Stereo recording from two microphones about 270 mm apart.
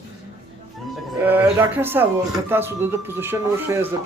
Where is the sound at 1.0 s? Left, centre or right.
Centre.